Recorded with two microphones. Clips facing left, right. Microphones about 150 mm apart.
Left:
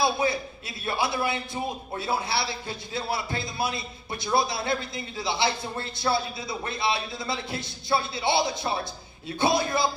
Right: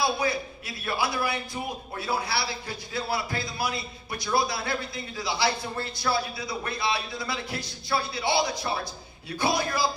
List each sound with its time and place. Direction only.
0.0 s a man's voice: 25° left (ahead or behind)